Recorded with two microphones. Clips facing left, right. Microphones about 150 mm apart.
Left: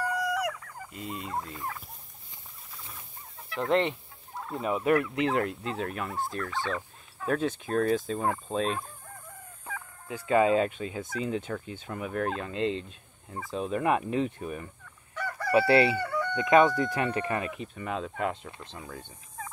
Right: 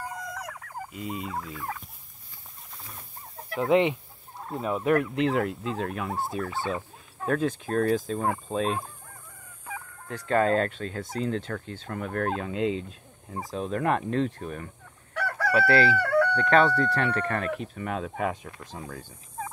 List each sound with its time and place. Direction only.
0.1 s turkey: 70° left (ahead or behind)
0.6 s fowl: 55° right (ahead or behind)
0.9 s speech: centre (ahead or behind)
3.5 s speech: 10° right (ahead or behind)
4.6 s speech: centre (ahead or behind)
10.0 s speech: 5° left (ahead or behind)
15.1 s chicken: 75° right (ahead or behind)
15.5 s chicken: 20° left (ahead or behind)
16.0 s chicken: 75° right (ahead or behind)
16.3 s speech: 10° left (ahead or behind)
17.6 s speech: centre (ahead or behind)